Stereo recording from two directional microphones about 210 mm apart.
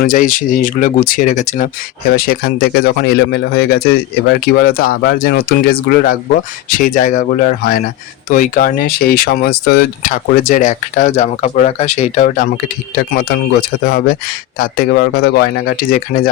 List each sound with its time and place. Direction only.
0.0 s speech: 40° left (ahead or behind)
13.1 s speech: 45° left (ahead or behind)